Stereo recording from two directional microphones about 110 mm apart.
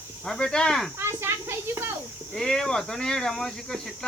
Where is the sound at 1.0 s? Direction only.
25° right (ahead or behind).